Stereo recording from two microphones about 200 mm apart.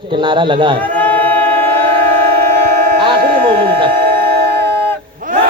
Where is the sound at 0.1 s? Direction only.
25° right (ahead or behind).